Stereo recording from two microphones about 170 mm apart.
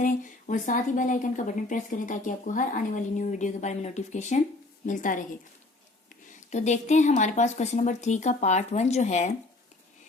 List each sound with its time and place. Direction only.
0.0 s speech: 50° left (ahead or behind)